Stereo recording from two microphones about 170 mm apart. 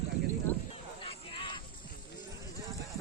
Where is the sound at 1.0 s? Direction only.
30° left (ahead or behind).